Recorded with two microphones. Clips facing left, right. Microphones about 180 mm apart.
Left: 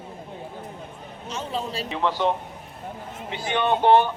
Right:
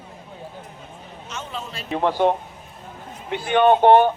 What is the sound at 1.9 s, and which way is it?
A man's voice, 50° right (ahead or behind).